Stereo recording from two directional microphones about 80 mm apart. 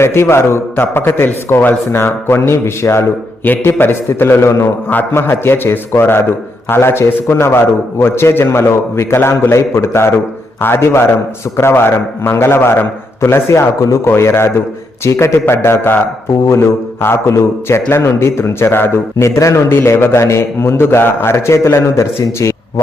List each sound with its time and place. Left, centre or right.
0.0 s a man's voice: left
4.9 s a man's voice: left